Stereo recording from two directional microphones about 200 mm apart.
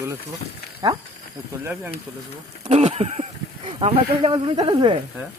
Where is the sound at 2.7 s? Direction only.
30° right (ahead or behind).